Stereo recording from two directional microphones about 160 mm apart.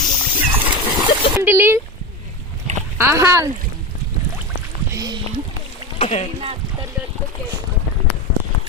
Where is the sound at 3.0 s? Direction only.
15° right (ahead or behind).